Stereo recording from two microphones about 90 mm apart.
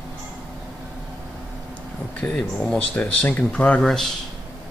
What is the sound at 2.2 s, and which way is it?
Speech, 10° left (ahead or behind).